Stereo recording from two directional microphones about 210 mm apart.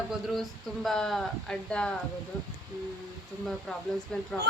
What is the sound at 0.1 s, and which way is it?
Speech, centre (ahead or behind).